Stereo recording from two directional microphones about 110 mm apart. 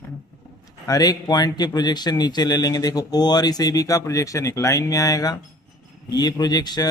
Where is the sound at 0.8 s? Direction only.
35° left (ahead or behind).